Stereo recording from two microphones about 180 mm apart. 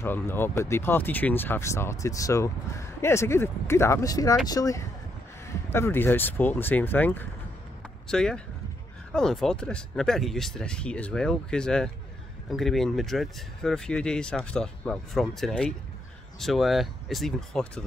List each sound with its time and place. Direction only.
0.0 s speech: 10° left (ahead or behind)